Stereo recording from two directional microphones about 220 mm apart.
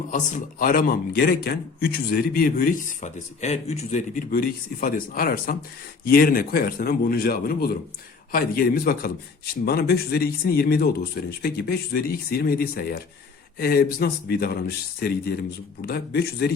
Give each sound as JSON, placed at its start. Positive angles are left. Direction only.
{"t": 0.1, "sound": "a man's voice", "side_deg": 35}